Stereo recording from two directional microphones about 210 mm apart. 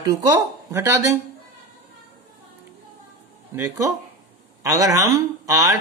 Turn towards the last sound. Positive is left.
turn(degrees=-15)  # may be behind; listen again after turning